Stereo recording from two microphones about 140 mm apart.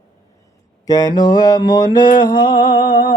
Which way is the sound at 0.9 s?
30° left (ahead or behind).